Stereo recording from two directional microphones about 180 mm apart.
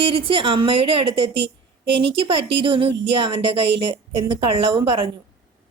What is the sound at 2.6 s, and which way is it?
A woman's voice, 30° right (ahead or behind).